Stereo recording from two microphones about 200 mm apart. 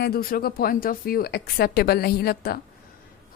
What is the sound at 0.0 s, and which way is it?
Speech, 50° left (ahead or behind).